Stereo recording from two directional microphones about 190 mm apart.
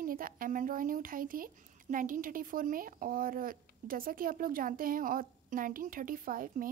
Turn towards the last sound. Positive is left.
turn(degrees=-45)  # may be behind; listen again after turning